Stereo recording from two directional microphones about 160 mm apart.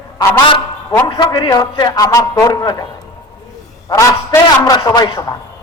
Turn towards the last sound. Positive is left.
turn(degrees=25)  # may be behind; listen again after turning